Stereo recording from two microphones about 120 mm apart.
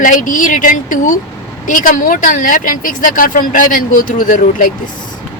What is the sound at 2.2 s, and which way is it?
Speech, 90° left.